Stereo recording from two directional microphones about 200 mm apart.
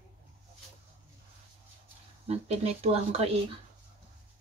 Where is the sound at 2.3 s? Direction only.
30° right (ahead or behind).